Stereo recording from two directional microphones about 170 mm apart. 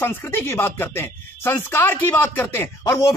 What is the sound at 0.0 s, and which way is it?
Speech, 10° left (ahead or behind).